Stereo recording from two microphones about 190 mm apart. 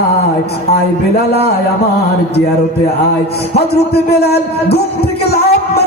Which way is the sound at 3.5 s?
55° left (ahead or behind).